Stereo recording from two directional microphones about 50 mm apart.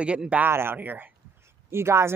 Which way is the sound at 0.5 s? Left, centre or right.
Right.